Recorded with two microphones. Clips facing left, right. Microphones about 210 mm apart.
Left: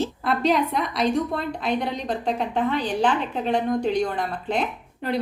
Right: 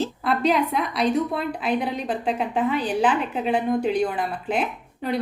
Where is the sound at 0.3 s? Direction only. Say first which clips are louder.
Right 1 dB; centre (ahead or behind).